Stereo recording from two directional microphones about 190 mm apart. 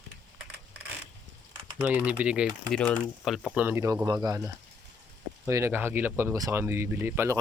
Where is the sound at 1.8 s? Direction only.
10° right (ahead or behind).